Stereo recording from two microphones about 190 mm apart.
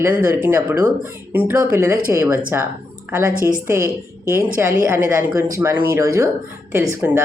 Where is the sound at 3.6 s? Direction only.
15° right (ahead or behind).